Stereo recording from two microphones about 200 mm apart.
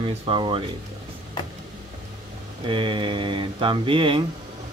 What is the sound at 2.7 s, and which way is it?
Speech, 25° right (ahead or behind).